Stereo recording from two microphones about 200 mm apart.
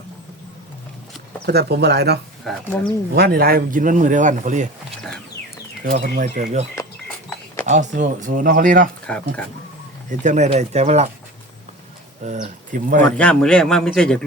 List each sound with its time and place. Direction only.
1.5 s speech: 55° right (ahead or behind)
2.7 s speech: 10° left (ahead or behind)
3.2 s speech: 50° right (ahead or behind)
5.8 s speech: 45° right (ahead or behind)
7.7 s speech: 35° right (ahead or behind)
9.0 s speech: 5° left (ahead or behind)
10.1 s speech: 35° right (ahead or behind)
12.2 s speech: 40° right (ahead or behind)
13.0 s a man's voice: 5° left (ahead or behind)